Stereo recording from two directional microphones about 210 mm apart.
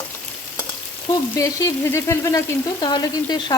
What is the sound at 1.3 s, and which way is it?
Frying, 15° left (ahead or behind).